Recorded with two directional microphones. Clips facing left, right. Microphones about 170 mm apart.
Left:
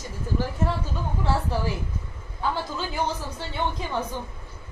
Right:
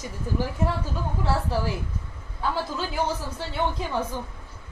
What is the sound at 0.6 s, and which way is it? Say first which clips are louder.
Speech: even; 15° right (ahead or behind).